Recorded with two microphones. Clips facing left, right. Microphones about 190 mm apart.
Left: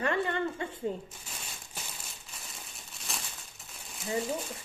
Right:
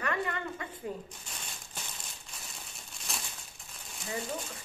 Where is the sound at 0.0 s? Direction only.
30° left (ahead or behind).